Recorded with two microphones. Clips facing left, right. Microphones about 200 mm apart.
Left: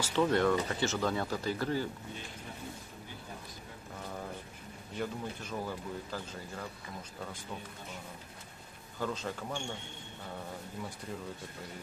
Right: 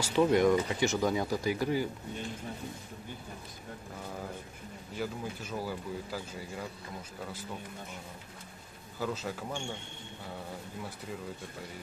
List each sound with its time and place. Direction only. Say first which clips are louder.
0.0 s speech: right 3 dB; 15° right (ahead or behind)
4.9 s speech: right 1 dB; 5° right (ahead or behind)
9.0 s speech: right 1 dB; 5° right (ahead or behind)